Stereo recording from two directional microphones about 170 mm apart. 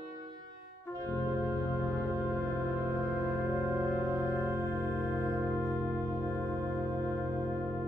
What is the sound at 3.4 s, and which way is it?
Music, 15° right (ahead or behind).